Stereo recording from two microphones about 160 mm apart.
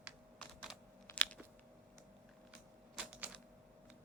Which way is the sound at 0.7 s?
Centre (ahead or behind).